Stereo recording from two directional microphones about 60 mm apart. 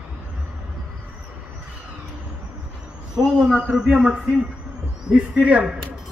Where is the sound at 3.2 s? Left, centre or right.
Centre.